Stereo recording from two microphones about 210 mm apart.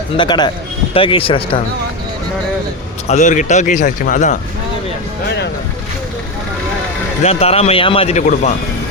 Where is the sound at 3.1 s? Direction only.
35° left (ahead or behind).